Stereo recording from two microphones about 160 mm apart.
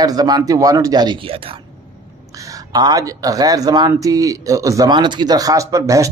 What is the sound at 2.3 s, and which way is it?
A man's voice, 20° right (ahead or behind).